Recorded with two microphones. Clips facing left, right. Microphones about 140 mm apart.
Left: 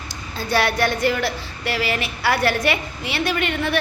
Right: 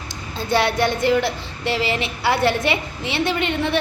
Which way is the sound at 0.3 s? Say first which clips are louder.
Right 1 dB; 20° right (ahead or behind).